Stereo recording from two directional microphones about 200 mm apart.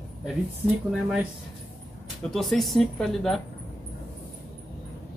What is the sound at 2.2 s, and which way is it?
Speech, centre (ahead or behind).